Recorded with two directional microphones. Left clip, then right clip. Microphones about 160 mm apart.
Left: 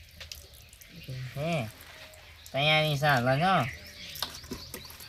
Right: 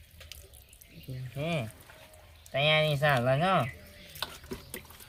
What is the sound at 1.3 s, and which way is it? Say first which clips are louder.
Speech: left 2 dB; centre (ahead or behind).